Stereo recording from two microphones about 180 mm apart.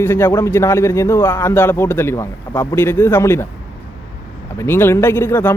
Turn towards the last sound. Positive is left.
turn(degrees=10)  # may be behind; listen again after turning